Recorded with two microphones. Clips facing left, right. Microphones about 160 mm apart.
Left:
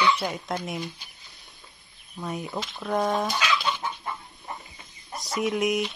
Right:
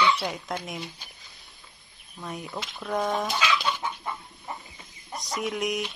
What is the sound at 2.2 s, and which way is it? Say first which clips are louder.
Speech: left 4 dB; centre (ahead or behind).